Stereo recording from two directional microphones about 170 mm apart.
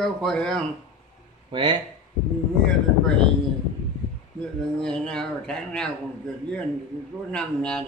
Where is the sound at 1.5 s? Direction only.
30° right (ahead or behind).